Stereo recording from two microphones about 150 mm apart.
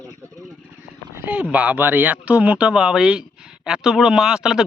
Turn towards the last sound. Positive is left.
turn(degrees=-5)  # may be behind; listen again after turning